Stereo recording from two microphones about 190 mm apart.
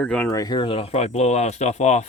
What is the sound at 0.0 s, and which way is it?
Speech, 5° left (ahead or behind).